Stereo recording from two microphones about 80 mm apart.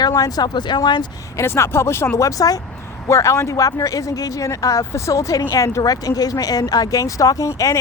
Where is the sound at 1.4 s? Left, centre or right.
Left.